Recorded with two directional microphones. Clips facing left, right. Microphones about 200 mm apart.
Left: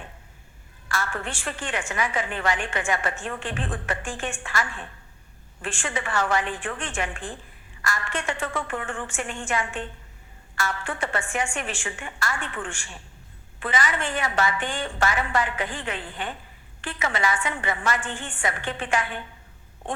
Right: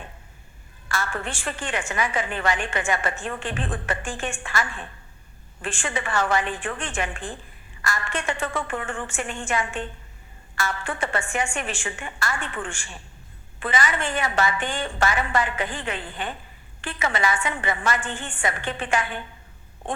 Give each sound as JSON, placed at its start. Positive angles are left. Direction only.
{"t": 0.9, "sound": "a woman's voice", "side_deg": -25}
{"t": 5.6, "sound": "a woman's voice", "side_deg": -20}